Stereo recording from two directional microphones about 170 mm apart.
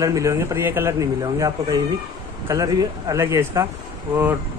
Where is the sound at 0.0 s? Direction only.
20° right (ahead or behind).